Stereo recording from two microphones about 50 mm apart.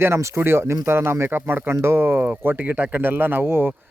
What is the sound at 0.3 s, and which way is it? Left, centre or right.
Speech, right.